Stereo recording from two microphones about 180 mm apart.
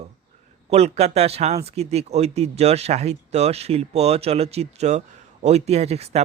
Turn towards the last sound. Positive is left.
turn(degrees=-35)  # may be behind; listen again after turning